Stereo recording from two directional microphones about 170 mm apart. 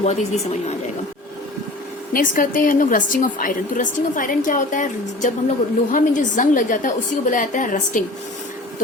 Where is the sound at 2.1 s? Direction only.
55° left (ahead or behind).